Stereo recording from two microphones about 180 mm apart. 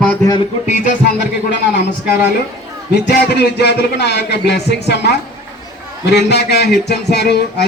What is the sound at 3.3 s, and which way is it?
Music, 65° left (ahead or behind).